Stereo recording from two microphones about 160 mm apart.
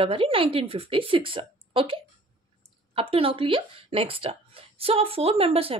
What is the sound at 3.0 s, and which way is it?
A woman's voice, 35° right (ahead or behind).